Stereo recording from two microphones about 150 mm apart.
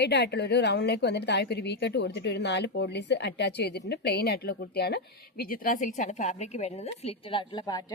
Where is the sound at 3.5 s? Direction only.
90° left.